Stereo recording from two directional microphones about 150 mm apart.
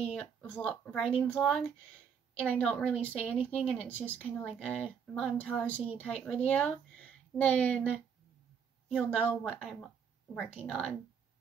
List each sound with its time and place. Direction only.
0.0 s speech: 10° left (ahead or behind)